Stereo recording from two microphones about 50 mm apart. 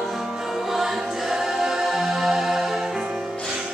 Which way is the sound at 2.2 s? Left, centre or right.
Centre.